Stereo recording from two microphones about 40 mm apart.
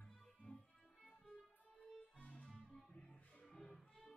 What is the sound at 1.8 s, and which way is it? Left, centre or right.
Music, left.